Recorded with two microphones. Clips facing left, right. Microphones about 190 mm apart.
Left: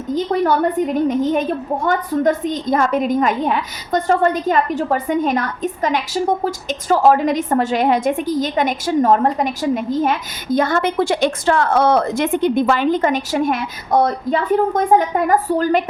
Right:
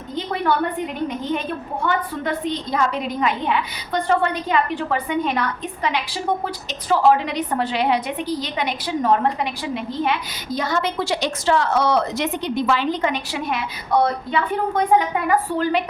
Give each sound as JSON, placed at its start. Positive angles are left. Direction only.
{"t": 0.1, "sound": "a woman's voice", "side_deg": 40}